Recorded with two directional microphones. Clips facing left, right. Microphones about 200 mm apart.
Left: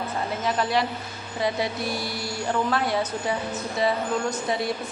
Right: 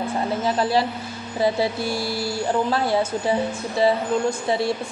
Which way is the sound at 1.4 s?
30° right (ahead or behind).